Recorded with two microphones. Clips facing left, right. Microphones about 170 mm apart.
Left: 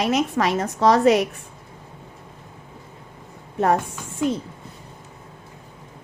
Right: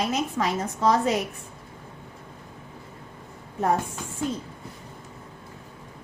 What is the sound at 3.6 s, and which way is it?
Speech, 80° left.